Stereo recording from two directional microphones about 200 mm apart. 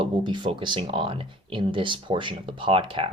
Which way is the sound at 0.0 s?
25° right (ahead or behind).